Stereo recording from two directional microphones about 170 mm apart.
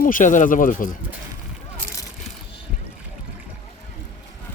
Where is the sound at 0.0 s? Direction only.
50° left (ahead or behind).